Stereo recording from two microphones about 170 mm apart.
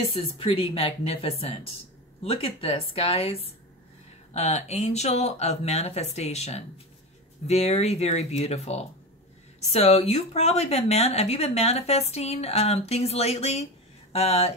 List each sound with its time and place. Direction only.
0.0 s speech: 35° left (ahead or behind)